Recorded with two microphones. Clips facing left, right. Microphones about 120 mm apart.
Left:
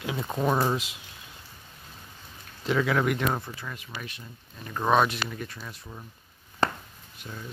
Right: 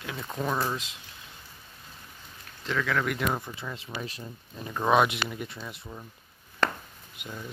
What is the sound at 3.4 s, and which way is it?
Speech, 20° right (ahead or behind).